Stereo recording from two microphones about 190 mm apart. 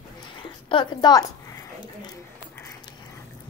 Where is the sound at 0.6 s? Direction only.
25° left (ahead or behind).